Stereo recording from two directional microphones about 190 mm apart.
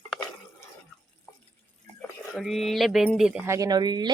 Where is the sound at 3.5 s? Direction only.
20° right (ahead or behind).